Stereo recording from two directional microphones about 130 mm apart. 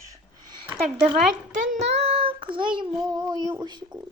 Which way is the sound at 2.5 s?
40° right (ahead or behind).